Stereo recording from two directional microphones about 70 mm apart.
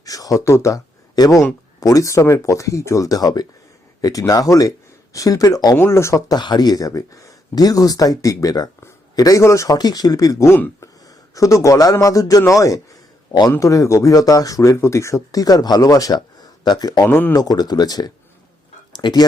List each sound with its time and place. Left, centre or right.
0.0 s speech: left
1.2 s speech: left
1.8 s speech: left
5.7 s speech: left
6.2 s a man's voice: left
9.4 s speech: left
9.7 s speech: left
10.4 s speech: left
10.8 s speech: left
13.6 s speech: left
16.6 s speech: left
17.1 s speech: left
17.3 s speech: left
18.9 s speech: left